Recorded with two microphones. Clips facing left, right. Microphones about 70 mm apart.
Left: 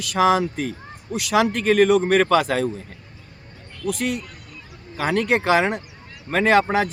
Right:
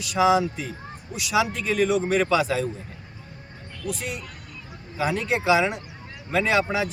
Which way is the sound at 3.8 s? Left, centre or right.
Left.